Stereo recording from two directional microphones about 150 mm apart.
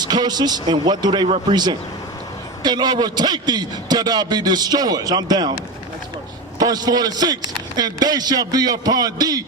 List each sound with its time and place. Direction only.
0.0 s a man's voice: 25° right (ahead or behind)
6.6 s a man's voice: 25° right (ahead or behind)